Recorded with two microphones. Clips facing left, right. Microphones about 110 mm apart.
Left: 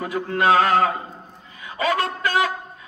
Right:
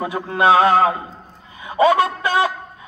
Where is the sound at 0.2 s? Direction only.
35° right (ahead or behind).